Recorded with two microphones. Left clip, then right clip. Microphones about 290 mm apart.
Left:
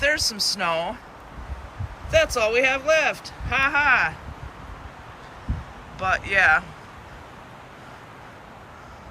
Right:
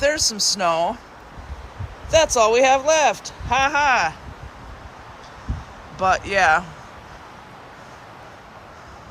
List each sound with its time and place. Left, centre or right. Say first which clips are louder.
0.0 s speech: right 2 dB; centre
2.0 s speech: right 4 dB; centre
6.0 s speech: right 2 dB; centre